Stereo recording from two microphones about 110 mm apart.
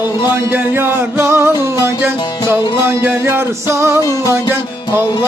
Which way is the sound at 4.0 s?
30° left (ahead or behind).